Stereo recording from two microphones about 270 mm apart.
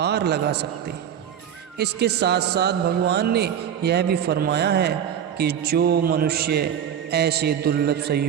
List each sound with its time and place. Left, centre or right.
0.0 s a man's voice: right
1.8 s a man's voice: right